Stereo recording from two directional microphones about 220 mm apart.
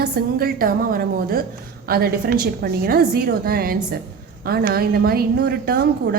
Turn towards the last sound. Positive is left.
turn(degrees=-45)  # may be behind; listen again after turning